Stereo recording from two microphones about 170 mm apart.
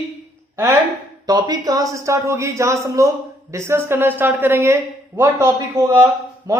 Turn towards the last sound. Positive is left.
turn(degrees=-20)  # may be behind; listen again after turning